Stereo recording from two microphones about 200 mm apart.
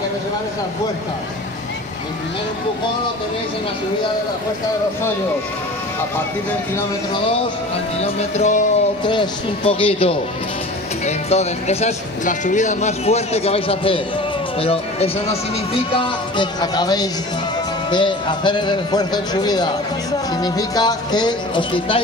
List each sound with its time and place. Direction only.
8.0 s speech: 35° left (ahead or behind)
9.0 s a man's voice: 25° left (ahead or behind)